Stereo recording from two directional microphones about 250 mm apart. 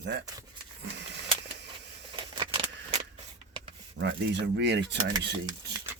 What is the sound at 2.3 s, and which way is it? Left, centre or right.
Keys jangling, centre.